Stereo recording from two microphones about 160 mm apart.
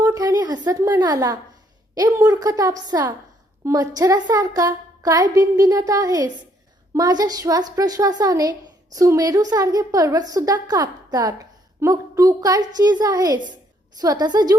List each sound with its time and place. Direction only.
0.0 s a woman's voice: 20° right (ahead or behind)